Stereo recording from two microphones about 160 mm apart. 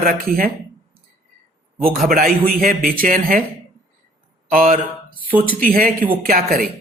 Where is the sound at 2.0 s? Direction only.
65° right (ahead or behind).